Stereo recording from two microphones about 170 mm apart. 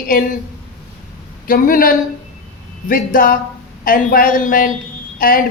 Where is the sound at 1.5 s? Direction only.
55° left (ahead or behind).